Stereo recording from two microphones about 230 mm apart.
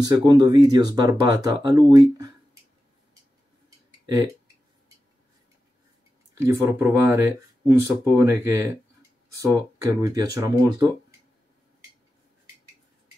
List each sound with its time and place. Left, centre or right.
0.0 s speech: centre
4.0 s tick-tock: centre
6.3 s speech: centre